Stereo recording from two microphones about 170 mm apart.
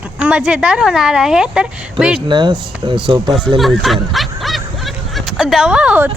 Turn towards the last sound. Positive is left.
turn(degrees=-5)  # may be behind; listen again after turning